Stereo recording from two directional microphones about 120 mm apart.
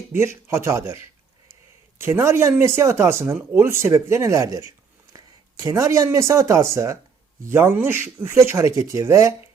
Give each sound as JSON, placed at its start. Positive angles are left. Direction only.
{"t": 0.1, "sound": "speech", "side_deg": -20}
{"t": 2.0, "sound": "speech", "side_deg": -20}